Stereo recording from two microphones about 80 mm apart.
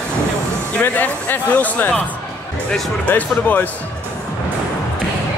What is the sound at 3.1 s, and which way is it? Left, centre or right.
Speech, left.